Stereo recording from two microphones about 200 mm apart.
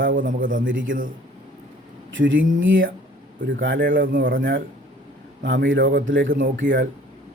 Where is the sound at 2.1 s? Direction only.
70° right (ahead or behind).